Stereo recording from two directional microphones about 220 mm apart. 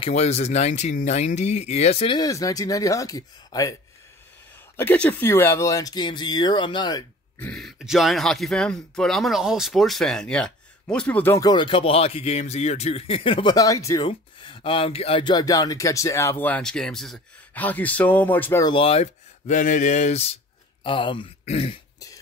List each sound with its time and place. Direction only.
0.0 s speech: 30° left (ahead or behind)
4.7 s speech: 5° left (ahead or behind)
7.3 s speech: 5° left (ahead or behind)
18.7 s speech: 25° left (ahead or behind)